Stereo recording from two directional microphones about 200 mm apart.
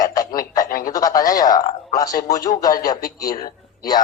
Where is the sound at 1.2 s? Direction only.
15° left (ahead or behind).